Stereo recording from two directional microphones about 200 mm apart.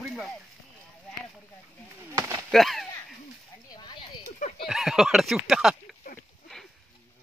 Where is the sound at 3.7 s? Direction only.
20° left (ahead or behind).